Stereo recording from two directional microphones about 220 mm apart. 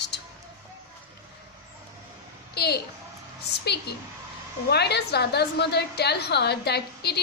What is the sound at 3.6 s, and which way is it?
A woman's voice, 50° left (ahead or behind).